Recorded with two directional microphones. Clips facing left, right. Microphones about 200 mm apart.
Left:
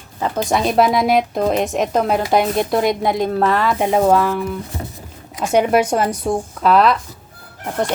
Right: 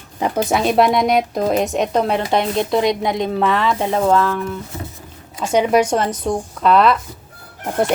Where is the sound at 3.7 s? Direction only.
15° left (ahead or behind).